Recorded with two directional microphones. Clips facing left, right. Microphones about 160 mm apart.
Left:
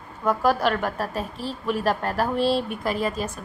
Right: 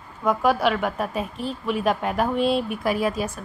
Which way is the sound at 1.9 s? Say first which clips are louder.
Right 3 dB; 10° right (ahead or behind).